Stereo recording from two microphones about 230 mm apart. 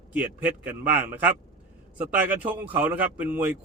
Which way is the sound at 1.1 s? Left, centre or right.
Centre.